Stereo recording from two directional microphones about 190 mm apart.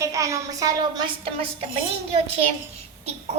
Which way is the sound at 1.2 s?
30° right (ahead or behind).